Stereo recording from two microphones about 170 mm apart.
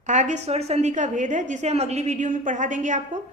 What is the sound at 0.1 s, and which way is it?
A woman's voice, 45° right (ahead or behind).